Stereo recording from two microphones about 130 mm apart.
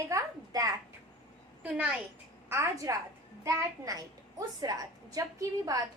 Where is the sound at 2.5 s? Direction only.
25° right (ahead or behind).